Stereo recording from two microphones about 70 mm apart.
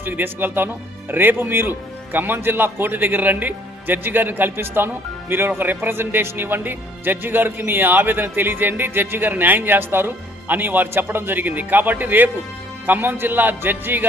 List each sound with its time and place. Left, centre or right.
0.0 s speech: right